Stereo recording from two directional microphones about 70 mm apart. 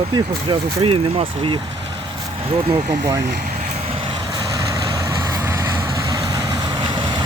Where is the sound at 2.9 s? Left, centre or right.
Right.